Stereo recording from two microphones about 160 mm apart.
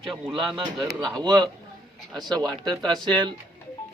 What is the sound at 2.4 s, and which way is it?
Speech, 25° right (ahead or behind).